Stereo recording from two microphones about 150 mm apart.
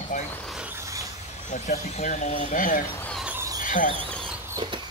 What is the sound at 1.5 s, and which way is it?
Speech, 55° left (ahead or behind).